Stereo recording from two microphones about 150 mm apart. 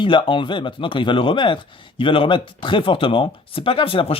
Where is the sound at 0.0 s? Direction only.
35° left (ahead or behind).